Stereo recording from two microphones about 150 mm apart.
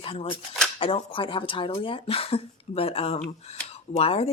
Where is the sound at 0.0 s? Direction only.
40° left (ahead or behind).